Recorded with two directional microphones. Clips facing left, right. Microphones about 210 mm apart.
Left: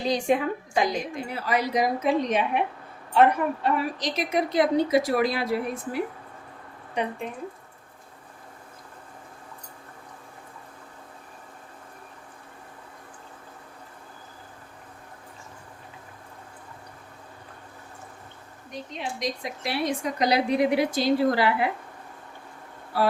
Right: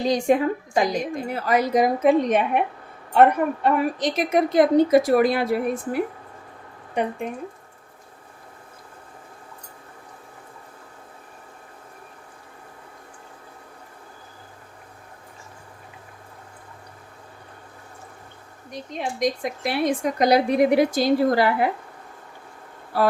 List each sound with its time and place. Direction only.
0.0 s a woman's voice: 45° right (ahead or behind)
18.9 s a woman's voice: 50° right (ahead or behind)